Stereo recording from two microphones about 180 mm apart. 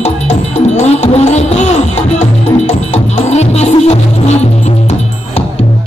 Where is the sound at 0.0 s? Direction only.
40° left (ahead or behind).